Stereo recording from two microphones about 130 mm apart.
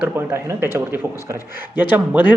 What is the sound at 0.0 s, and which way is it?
A man's voice, 20° right (ahead or behind).